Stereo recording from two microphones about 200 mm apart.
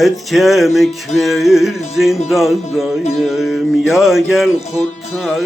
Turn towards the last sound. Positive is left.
turn(degrees=0)  # may be behind; listen again after turning